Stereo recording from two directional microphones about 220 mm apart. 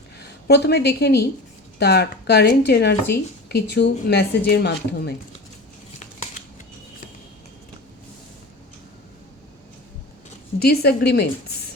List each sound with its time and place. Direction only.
0.2 s a woman's voice: 50° left (ahead or behind)
10.6 s a woman's voice: 45° left (ahead or behind)